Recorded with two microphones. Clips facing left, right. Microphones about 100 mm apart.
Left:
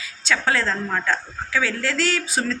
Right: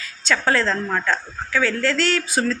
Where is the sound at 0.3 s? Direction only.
5° left (ahead or behind).